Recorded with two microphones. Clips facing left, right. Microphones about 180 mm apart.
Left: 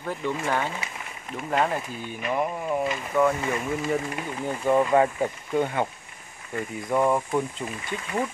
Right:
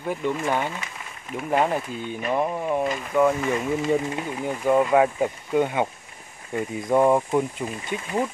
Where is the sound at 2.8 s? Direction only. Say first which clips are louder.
Right 2 dB; 5° right (ahead or behind).